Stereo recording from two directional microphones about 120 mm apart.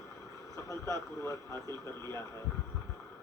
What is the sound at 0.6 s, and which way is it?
Speech, 25° left (ahead or behind).